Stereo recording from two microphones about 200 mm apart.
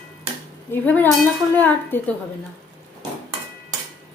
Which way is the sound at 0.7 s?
10° left (ahead or behind).